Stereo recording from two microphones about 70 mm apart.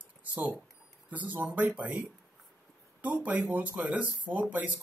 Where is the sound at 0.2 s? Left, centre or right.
Right.